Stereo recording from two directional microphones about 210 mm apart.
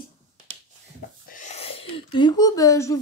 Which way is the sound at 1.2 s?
35° left (ahead or behind).